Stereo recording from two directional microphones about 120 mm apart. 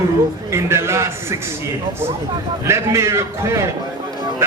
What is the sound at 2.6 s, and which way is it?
A man's voice, 25° right (ahead or behind).